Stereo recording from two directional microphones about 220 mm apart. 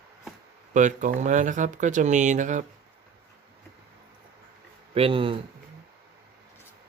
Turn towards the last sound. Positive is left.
turn(degrees=-25)  # may be behind; listen again after turning